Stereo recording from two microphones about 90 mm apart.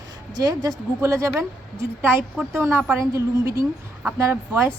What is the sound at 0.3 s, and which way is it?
A woman's voice, 45° right (ahead or behind).